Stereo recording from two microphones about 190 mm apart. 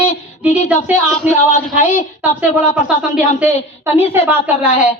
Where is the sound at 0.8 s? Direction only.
10° right (ahead or behind).